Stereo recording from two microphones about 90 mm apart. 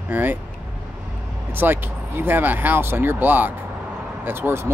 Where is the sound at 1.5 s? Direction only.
25° right (ahead or behind).